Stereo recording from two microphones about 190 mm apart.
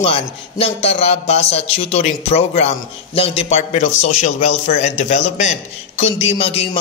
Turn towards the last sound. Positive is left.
turn(degrees=30)  # may be behind; listen again after turning